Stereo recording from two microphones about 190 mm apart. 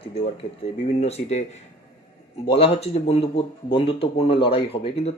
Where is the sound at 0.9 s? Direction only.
35° left (ahead or behind).